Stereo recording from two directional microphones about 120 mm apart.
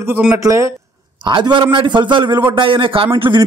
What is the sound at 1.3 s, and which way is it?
A man's voice, 40° right (ahead or behind).